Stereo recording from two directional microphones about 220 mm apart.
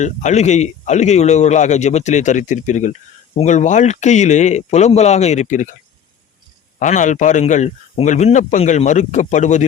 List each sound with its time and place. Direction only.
0.0 s speech: 30° left (ahead or behind)
6.7 s speech: 35° left (ahead or behind)